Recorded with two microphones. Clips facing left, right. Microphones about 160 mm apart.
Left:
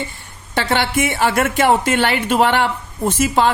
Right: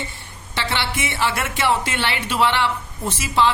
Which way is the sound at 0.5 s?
45° left (ahead or behind).